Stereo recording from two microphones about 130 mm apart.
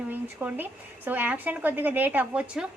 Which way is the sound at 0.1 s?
15° right (ahead or behind).